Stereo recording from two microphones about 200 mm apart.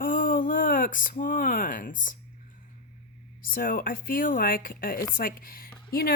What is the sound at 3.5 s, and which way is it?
Speech, 45° left (ahead or behind).